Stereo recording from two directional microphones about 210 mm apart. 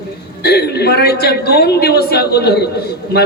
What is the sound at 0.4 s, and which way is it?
A man's voice, 50° left (ahead or behind).